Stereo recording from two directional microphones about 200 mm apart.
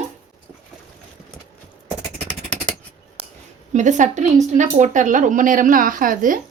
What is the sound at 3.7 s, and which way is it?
A woman's voice, 35° right (ahead or behind).